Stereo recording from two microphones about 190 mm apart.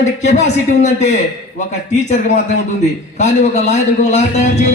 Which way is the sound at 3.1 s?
40° left (ahead or behind).